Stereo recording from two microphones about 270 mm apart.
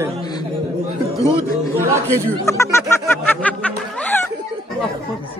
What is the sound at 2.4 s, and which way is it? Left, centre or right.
Music, centre.